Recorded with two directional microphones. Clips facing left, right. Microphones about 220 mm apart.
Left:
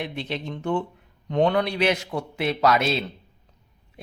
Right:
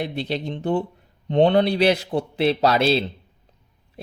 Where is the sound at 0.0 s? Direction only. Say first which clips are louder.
Right 4 dB; 35° right (ahead or behind).